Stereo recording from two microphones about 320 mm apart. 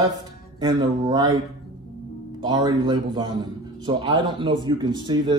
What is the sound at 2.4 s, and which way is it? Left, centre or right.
Speech, centre.